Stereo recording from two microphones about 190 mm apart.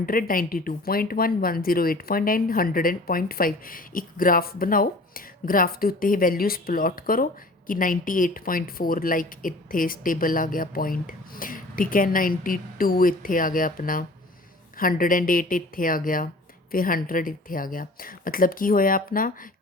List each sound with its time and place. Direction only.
0.0 s a woman's voice: 50° left (ahead or behind)